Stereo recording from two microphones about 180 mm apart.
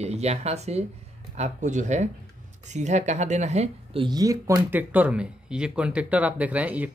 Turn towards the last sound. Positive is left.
turn(degrees=-10)  # may be behind; listen again after turning